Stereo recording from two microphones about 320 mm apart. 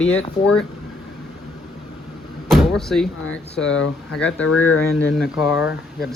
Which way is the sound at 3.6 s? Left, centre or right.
Left.